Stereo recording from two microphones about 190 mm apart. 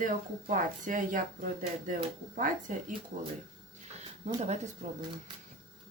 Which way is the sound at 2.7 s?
45° right (ahead or behind).